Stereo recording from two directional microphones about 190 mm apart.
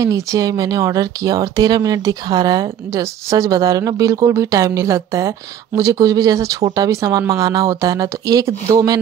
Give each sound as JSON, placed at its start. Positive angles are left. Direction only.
{"t": 0.0, "sound": "speech", "side_deg": -15}